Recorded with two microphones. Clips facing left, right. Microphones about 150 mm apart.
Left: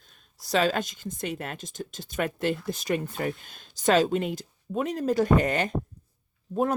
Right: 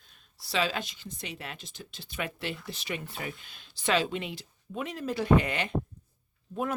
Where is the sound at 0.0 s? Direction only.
45° left (ahead or behind).